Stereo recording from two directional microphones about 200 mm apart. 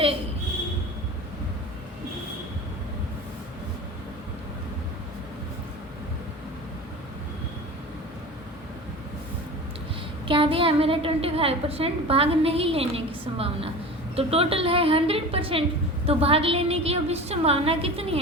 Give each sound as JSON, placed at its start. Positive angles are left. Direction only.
{"t": 10.2, "sound": "a woman's voice", "side_deg": -25}